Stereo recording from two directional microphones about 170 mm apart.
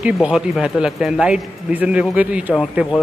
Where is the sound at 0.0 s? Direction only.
5° right (ahead or behind).